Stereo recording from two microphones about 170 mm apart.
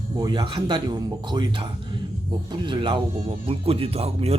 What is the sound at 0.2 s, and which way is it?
Speech, 25° right (ahead or behind).